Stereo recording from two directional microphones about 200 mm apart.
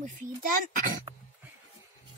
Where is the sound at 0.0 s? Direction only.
40° right (ahead or behind).